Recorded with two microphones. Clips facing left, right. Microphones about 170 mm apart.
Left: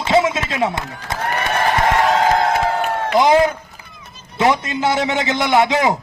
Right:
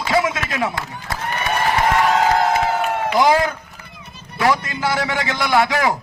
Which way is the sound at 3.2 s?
20° left (ahead or behind).